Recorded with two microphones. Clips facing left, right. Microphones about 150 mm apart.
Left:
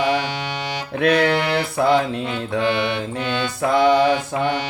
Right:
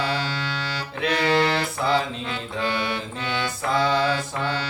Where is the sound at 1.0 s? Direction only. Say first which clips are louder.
Left 7 dB; 60° left (ahead or behind).